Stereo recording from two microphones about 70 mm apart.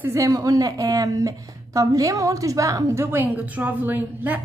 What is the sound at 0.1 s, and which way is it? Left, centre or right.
A woman's voice, right.